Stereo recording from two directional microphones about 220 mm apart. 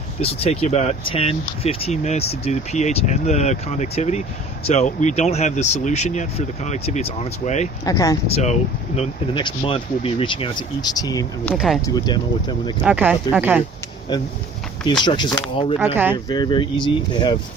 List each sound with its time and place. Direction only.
0.2 s speech: 25° left (ahead or behind)
7.9 s speech: 15° left (ahead or behind)
8.3 s speech: 30° left (ahead or behind)
11.5 s speech: centre (ahead or behind)
11.9 s speech: 20° left (ahead or behind)
12.8 s speech: 10° right (ahead or behind)
14.1 s speech: 20° left (ahead or behind)
15.8 s speech: 10° right (ahead or behind)
16.1 s speech: 20° left (ahead or behind)